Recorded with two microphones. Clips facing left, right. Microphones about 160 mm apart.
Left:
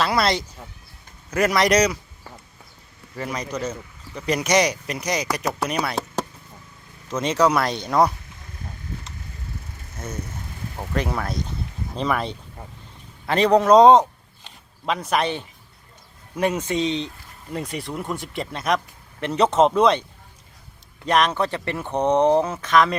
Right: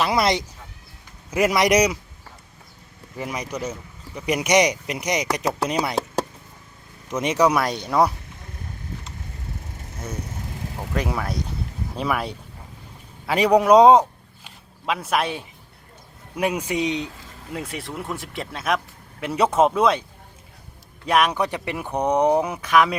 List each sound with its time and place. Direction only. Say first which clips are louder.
0.0 s speech: right 1 dB; 15° right (ahead or behind)
3.2 s speech: left 1 dB; 15° right (ahead or behind)
7.1 s speech: even; 15° right (ahead or behind)
10.9 s speech: even; 10° right (ahead or behind)
14.4 s zipper: left 1 dB; 5° right (ahead or behind)
16.3 s speech: left 1 dB; 10° right (ahead or behind)
17.5 s speech: left 2 dB; centre (ahead or behind)
21.1 s speech: even; 10° right (ahead or behind)